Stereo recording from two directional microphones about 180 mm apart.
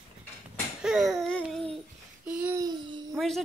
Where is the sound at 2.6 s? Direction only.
25° right (ahead or behind).